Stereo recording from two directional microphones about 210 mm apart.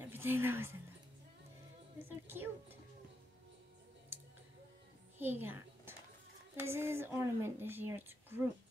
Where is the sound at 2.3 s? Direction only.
10° right (ahead or behind).